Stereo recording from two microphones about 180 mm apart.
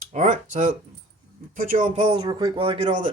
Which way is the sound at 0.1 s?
40° right (ahead or behind).